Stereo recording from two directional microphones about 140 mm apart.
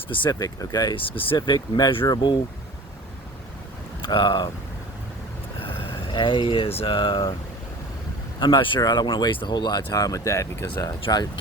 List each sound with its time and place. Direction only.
0.1 s speech: 35° left (ahead or behind)
4.0 s speech: 35° left (ahead or behind)
6.1 s speech: 35° left (ahead or behind)
8.4 s speech: 35° left (ahead or behind)